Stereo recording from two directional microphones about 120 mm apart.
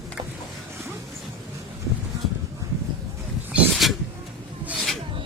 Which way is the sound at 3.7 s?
Centre (ahead or behind).